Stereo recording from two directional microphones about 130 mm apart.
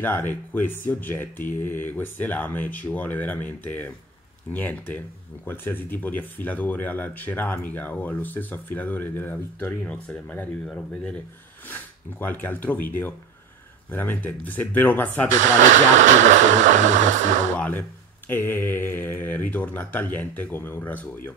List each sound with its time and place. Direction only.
0.0 s speech: 15° left (ahead or behind)
16.0 s speech: 70° right (ahead or behind)
17.6 s speech: 15° left (ahead or behind)